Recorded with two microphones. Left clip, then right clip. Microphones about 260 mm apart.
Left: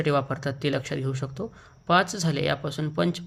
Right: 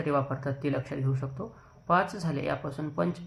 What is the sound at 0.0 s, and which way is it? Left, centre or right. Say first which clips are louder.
Speech: left 4 dB; left.